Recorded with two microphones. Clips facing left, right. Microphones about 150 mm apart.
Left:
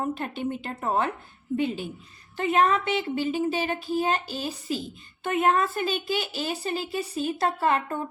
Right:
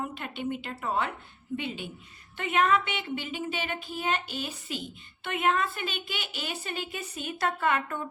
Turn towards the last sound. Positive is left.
turn(degrees=35)  # may be behind; listen again after turning